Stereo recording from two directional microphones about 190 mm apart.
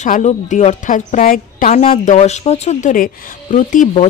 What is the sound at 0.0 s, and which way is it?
Speech, 40° left (ahead or behind).